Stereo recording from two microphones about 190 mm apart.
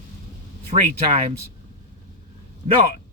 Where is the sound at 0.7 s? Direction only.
35° right (ahead or behind).